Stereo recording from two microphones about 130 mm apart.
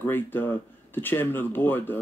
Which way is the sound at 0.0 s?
15° left (ahead or behind).